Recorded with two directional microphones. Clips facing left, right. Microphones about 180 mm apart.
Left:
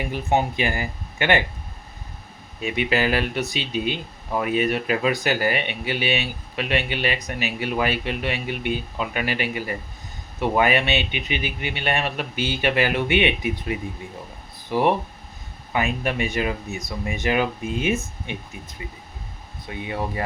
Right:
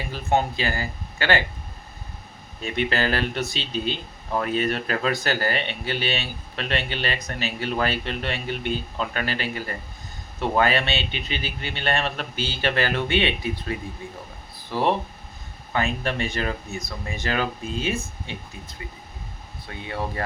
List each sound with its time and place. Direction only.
0.0 s speech: 15° left (ahead or behind)
2.6 s speech: 10° left (ahead or behind)
19.6 s speech: 15° left (ahead or behind)